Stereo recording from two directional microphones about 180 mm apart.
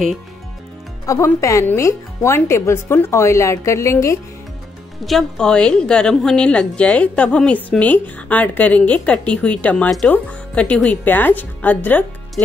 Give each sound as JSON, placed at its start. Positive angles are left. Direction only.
{"t": 1.0, "sound": "a woman's voice", "side_deg": 15}
{"t": 5.0, "sound": "a woman's voice", "side_deg": 0}